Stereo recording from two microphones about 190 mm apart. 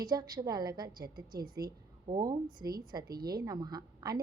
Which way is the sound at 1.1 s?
50° right (ahead or behind).